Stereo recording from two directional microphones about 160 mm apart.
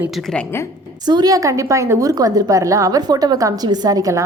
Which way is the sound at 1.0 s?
25° right (ahead or behind).